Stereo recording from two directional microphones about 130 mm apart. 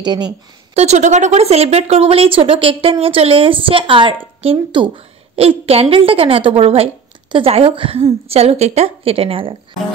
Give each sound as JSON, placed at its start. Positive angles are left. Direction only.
{"t": 0.0, "sound": "a woman's voice", "side_deg": -35}
{"t": 0.7, "sound": "speech", "side_deg": -60}